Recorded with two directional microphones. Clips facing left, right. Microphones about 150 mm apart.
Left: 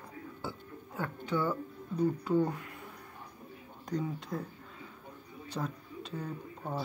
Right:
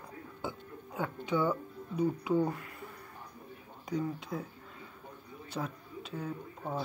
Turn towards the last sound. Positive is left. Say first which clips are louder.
# right 1 dB
turn(degrees=-5)  # may be behind; listen again after turning